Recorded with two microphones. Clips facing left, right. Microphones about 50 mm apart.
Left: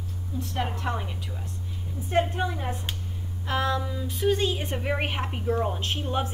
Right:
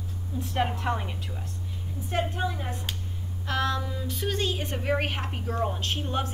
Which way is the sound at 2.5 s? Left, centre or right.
Left.